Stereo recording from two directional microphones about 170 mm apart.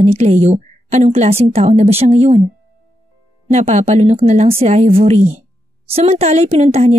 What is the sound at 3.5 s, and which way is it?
A woman's voice, 45° right (ahead or behind).